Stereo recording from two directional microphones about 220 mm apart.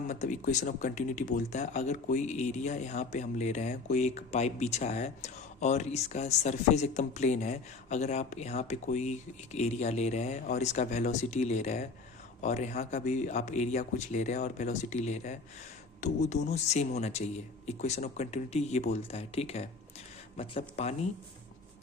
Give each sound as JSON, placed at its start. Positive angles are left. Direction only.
{"t": 0.1, "sound": "speech", "side_deg": 35}